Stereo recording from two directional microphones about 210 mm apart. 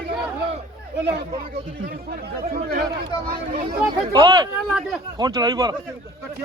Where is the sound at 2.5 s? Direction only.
45° right (ahead or behind).